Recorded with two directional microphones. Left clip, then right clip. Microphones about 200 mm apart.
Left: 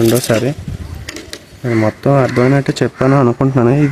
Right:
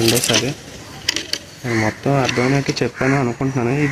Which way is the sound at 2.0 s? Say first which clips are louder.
Left 7 dB; 50° left (ahead or behind).